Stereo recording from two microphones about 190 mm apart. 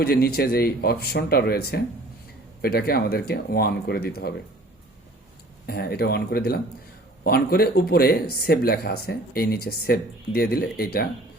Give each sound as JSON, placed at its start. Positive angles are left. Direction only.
{"t": 0.0, "sound": "speech", "side_deg": 55}
{"t": 5.6, "sound": "speech", "side_deg": 55}